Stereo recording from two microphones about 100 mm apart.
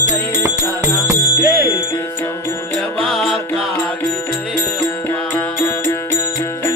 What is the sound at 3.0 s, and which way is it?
Music, centre (ahead or behind).